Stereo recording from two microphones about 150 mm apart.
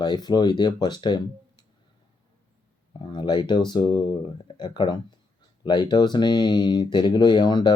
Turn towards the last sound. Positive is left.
turn(degrees=30)  # may be behind; listen again after turning